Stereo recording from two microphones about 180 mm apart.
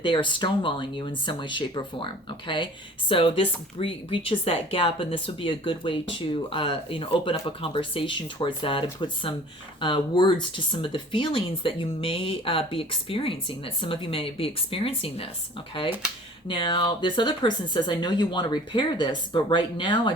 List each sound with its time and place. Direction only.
0.0 s speech: 25° left (ahead or behind)
3.1 s speech: 30° left (ahead or behind)
16.5 s speech: 25° left (ahead or behind)